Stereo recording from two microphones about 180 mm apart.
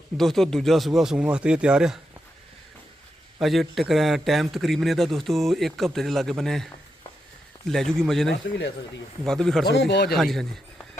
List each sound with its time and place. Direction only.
0.2 s a man's voice: centre (ahead or behind)
3.4 s a man's voice: centre (ahead or behind)
7.7 s a man's voice: centre (ahead or behind)
9.6 s speech: 70° left (ahead or behind)
10.2 s a man's voice: centre (ahead or behind)